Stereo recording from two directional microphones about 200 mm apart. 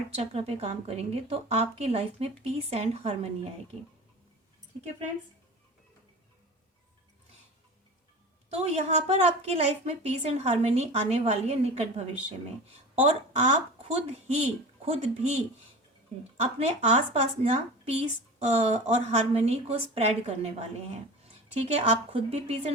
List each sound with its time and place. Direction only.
0.2 s speech: 30° right (ahead or behind)
8.4 s speech: 35° right (ahead or behind)
16.6 s speech: 30° right (ahead or behind)